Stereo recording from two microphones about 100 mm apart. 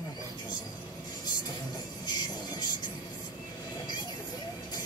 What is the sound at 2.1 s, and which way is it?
Music, 45° left (ahead or behind).